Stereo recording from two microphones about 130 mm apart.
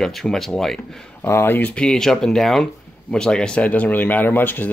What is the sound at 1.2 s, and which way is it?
Speech, 15° left (ahead or behind).